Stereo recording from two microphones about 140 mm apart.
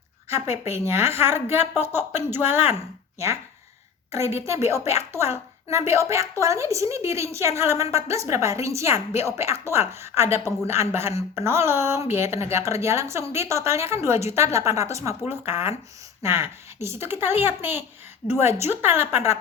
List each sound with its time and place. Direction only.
0.3 s speech: 20° right (ahead or behind)
4.1 s speech: 20° right (ahead or behind)